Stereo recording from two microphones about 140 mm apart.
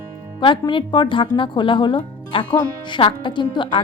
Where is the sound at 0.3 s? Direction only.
35° left (ahead or behind).